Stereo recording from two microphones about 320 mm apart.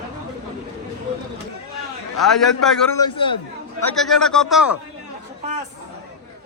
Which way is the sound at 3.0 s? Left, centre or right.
Centre.